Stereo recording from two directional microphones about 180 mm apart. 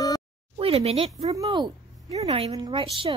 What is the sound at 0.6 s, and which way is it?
Speech, 35° right (ahead or behind).